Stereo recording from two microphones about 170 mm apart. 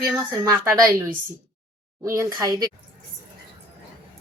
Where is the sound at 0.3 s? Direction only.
15° right (ahead or behind).